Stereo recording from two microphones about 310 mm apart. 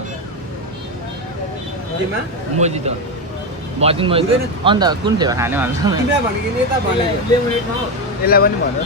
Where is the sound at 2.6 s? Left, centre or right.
Right.